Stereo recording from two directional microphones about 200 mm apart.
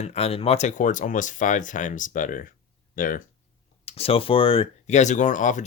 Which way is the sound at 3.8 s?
30° left (ahead or behind).